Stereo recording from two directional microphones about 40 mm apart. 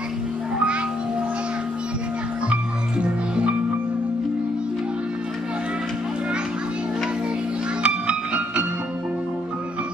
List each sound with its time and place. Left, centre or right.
2.5 s music: right
7.8 s music: right